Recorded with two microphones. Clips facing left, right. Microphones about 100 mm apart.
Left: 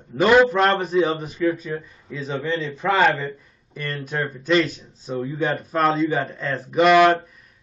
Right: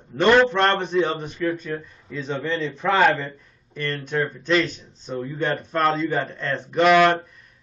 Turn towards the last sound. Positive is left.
turn(degrees=5)  # may be behind; listen again after turning